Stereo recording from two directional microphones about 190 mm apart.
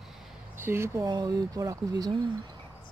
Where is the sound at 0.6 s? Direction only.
15° right (ahead or behind).